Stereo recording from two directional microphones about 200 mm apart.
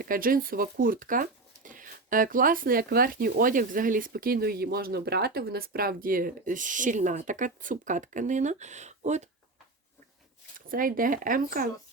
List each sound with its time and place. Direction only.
0.0 s speech: 45° right (ahead or behind)
10.7 s speech: 45° right (ahead or behind)